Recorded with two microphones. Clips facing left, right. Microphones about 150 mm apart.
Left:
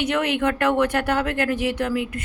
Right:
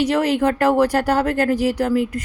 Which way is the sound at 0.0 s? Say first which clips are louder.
Right 4 dB; 35° right (ahead or behind).